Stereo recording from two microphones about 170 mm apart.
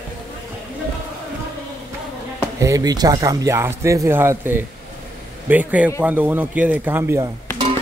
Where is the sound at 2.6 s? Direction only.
20° right (ahead or behind).